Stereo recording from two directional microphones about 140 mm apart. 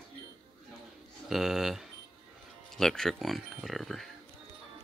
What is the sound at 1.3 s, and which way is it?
Speech, 5° right (ahead or behind).